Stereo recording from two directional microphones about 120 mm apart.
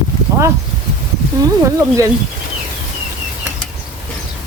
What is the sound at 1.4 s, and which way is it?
Speech, 25° right (ahead or behind).